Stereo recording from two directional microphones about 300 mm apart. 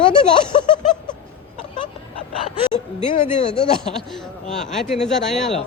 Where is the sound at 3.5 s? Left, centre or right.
Centre.